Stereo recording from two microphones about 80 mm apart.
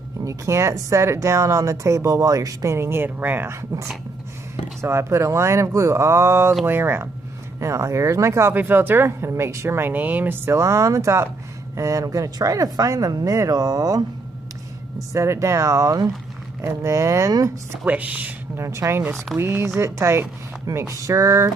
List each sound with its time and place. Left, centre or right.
0.2 s speech: right
4.8 s speech: right
15.0 s speech: right
17.8 s speech: centre
18.6 s speech: right